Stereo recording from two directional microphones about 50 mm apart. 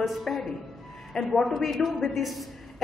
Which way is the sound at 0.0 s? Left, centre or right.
Centre.